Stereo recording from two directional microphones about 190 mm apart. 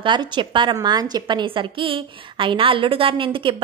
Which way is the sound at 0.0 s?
25° right (ahead or behind).